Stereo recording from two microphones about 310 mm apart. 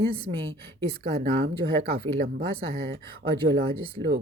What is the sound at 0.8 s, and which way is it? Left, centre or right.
Speech, centre.